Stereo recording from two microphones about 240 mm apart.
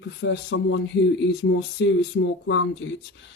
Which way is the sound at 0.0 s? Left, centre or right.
Left.